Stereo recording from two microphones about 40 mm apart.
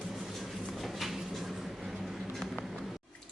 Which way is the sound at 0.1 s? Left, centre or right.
Centre.